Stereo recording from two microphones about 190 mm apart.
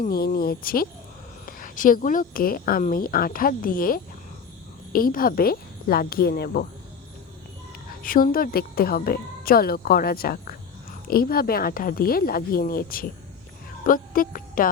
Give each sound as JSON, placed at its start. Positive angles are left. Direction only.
{"t": 0.0, "sound": "speech", "side_deg": 50}
{"t": 8.0, "sound": "speech", "side_deg": 50}
{"t": 13.8, "sound": "music", "side_deg": 50}